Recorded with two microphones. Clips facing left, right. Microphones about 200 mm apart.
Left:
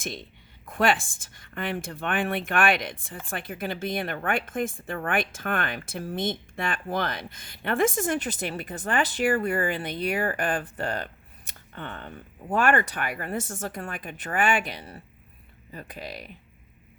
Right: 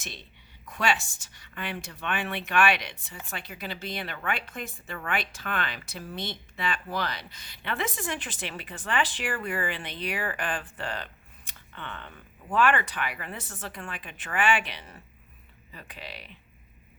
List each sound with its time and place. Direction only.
0.6 s speech: 50° left (ahead or behind)